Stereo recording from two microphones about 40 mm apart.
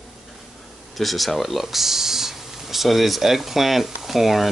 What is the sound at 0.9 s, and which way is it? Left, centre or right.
Speech, centre.